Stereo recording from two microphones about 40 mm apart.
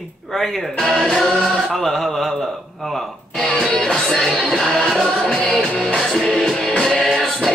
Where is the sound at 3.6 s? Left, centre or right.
Centre.